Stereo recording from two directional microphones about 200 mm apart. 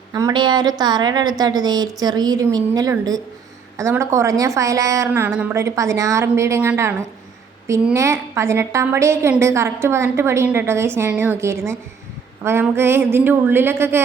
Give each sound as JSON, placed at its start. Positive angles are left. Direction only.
{"t": 0.1, "sound": "a woman's voice", "side_deg": -20}